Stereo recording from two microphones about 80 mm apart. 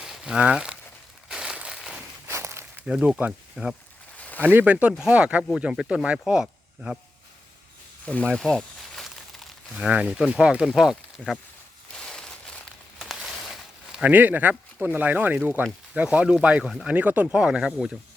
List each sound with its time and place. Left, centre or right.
0.0 s a sound: centre
2.2 s a sound: right
2.8 s speech: centre
3.5 s speech: centre
4.4 s speech: right; by 7.0 s centre
8.0 s speech: centre
8.3 s speech: centre
11.9 s a sound: centre
13.0 s a sound: centre
14.0 s speech: right
16.6 s speech: centre
16.9 s speech: centre